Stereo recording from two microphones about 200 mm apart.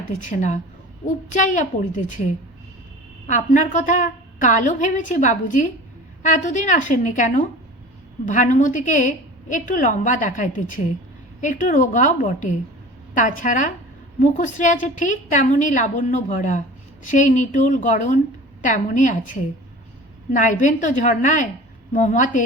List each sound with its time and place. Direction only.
0.2 s a woman's voice: 40° left (ahead or behind)
3.2 s a woman's voice: 40° left (ahead or behind)